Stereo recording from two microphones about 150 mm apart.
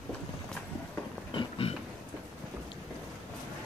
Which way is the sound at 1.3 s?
35° left (ahead or behind).